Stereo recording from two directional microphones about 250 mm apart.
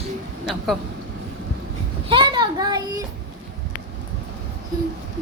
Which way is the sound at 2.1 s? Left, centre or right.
Centre.